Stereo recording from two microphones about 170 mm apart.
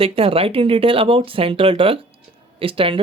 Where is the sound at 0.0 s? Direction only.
35° right (ahead or behind).